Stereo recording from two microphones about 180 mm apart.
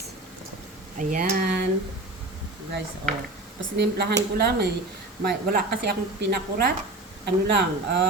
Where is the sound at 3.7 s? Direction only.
60° right (ahead or behind).